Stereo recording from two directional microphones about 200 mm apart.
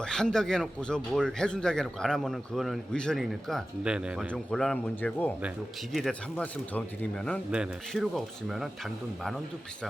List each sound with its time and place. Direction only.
0.0 s speech: 5° left (ahead or behind)